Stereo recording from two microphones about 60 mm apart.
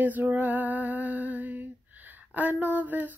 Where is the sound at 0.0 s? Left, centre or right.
Right.